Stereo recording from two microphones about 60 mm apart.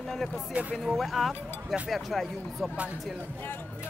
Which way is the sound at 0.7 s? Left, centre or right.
Centre.